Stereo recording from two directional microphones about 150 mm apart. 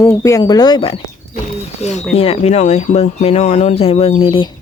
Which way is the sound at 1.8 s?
50° left (ahead or behind).